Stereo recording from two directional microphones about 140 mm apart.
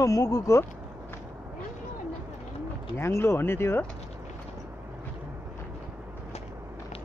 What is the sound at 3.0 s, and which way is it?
Speech, 20° left (ahead or behind).